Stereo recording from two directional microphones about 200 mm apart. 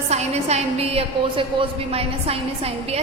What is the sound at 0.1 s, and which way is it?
A woman's voice, 35° right (ahead or behind).